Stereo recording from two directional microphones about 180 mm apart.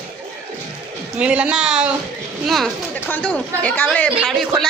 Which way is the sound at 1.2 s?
5° right (ahead or behind).